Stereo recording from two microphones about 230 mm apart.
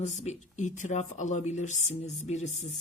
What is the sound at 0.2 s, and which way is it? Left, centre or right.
Speech, left.